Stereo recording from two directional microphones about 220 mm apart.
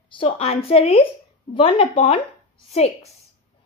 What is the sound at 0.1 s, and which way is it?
Speech, 25° left (ahead or behind).